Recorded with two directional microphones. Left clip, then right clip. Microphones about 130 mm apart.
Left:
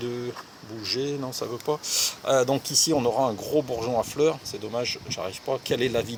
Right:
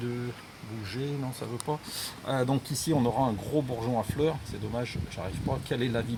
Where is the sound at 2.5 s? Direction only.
20° left (ahead or behind).